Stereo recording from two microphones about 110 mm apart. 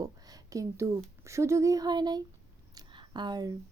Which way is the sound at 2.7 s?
40° right (ahead or behind).